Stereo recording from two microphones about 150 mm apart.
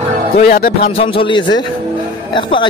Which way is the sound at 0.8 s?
40° left (ahead or behind).